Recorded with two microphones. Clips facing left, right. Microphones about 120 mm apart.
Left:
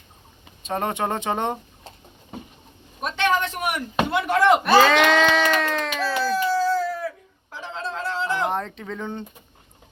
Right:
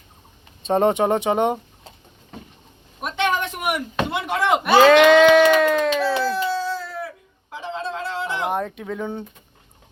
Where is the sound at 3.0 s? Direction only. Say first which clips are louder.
Even; 15° right (ahead or behind).